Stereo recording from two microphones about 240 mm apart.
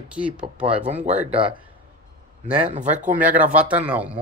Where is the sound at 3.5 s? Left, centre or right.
Centre.